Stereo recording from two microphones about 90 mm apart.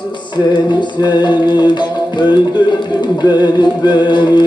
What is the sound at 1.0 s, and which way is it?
Music, 55° left (ahead or behind).